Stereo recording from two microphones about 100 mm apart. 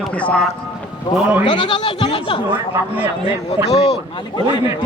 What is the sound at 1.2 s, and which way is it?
Speech, 15° right (ahead or behind).